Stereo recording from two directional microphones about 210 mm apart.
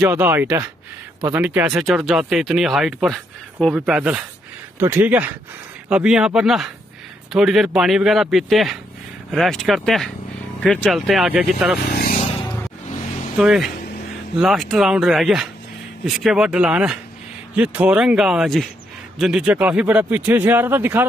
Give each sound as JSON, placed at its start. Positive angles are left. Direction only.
{"t": 0.0, "sound": "speech", "side_deg": -10}
{"t": 11.9, "sound": "vehicle", "side_deg": 40}
{"t": 13.4, "sound": "speech", "side_deg": 0}